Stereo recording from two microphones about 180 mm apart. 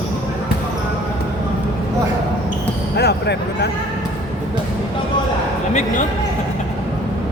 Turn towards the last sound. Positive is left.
turn(degrees=40)  # may be behind; listen again after turning